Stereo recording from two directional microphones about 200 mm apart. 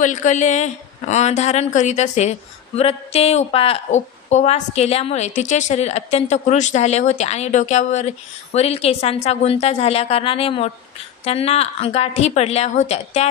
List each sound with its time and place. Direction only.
0.0 s a woman's voice: 40° left (ahead or behind)